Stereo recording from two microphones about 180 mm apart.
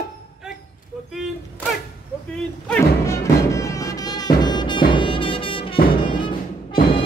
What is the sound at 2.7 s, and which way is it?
Music, 15° left (ahead or behind).